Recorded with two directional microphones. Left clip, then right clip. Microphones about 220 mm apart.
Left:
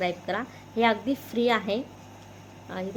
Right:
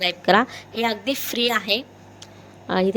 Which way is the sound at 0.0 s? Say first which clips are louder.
Right 11 dB; 45° right (ahead or behind).